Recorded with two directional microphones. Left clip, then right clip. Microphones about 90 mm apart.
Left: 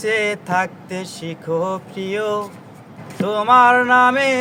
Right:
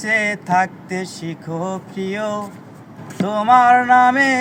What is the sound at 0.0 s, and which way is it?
Mantra, 45° left (ahead or behind).